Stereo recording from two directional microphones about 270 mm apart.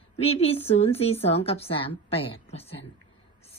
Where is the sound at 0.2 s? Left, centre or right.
Left.